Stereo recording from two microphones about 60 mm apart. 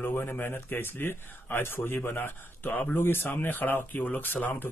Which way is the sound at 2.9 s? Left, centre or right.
Left.